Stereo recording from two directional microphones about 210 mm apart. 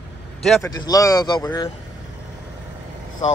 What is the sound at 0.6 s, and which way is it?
Speech, 15° left (ahead or behind).